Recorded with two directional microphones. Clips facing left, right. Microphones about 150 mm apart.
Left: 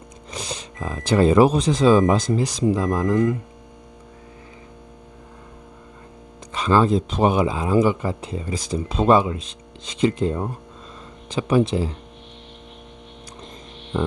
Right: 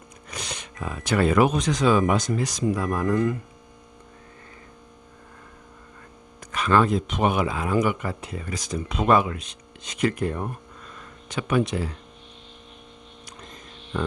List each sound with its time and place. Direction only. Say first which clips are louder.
0.3 s speech: left 4 dB; 30° left (ahead or behind)
6.5 s speech: left 3 dB; 30° left (ahead or behind)
13.4 s music: left 4 dB; 25° left (ahead or behind)